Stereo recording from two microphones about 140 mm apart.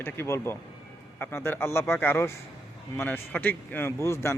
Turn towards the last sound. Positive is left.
turn(degrees=20)  # may be behind; listen again after turning